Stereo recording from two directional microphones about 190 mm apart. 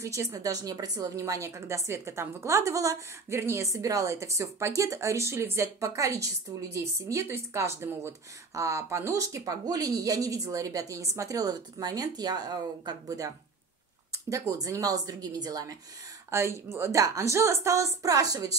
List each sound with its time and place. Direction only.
0.0 s a woman's voice: 15° right (ahead or behind)
14.5 s a woman's voice: 15° right (ahead or behind)